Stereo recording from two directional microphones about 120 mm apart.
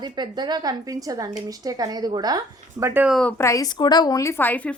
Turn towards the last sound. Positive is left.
turn(degrees=15)  # may be behind; listen again after turning